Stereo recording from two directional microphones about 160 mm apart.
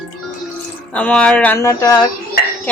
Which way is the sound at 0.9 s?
10° left (ahead or behind).